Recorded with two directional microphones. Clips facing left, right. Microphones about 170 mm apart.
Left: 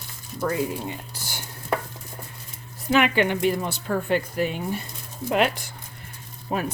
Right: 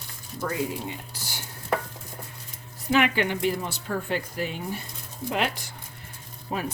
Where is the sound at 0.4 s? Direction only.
45° left (ahead or behind).